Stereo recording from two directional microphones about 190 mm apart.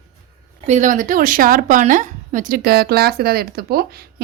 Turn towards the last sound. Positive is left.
turn(degrees=-55)  # may be behind; listen again after turning